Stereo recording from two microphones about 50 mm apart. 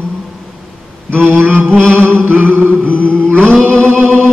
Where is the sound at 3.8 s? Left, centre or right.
Right.